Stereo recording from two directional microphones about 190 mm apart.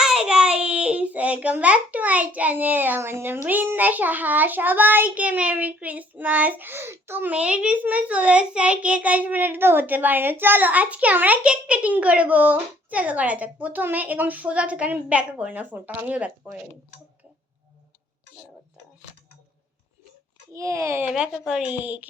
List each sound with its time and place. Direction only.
0.0 s a child's voice: 5° right (ahead or behind)
20.5 s a child's voice: 15° right (ahead or behind)
21.1 s speech: 5° right (ahead or behind)